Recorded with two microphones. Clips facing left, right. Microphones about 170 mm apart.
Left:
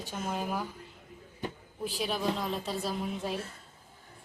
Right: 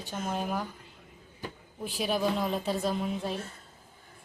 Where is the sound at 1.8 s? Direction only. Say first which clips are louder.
Right 2 dB; centre (ahead or behind).